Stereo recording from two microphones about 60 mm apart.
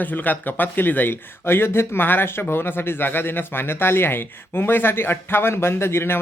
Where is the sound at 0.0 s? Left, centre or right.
Left.